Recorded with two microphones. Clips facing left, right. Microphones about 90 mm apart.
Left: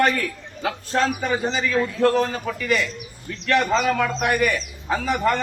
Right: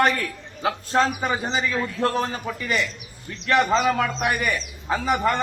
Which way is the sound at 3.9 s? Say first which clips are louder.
Left 2 dB; 20° right (ahead or behind).